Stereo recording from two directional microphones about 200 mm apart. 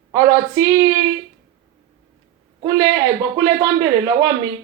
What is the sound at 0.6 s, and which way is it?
Speech, 20° right (ahead or behind).